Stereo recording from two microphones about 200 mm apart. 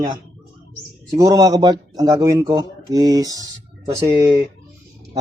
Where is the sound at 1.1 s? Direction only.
15° right (ahead or behind).